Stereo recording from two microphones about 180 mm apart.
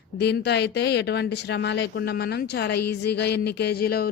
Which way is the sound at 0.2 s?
65° left (ahead or behind).